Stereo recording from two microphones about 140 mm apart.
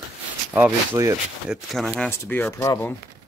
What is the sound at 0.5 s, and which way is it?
Speech, 20° right (ahead or behind).